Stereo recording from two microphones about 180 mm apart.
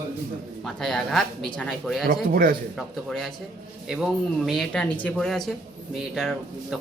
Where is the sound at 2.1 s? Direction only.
55° right (ahead or behind).